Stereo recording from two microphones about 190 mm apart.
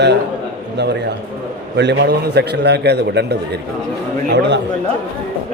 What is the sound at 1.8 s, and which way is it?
A man's voice, 65° right (ahead or behind).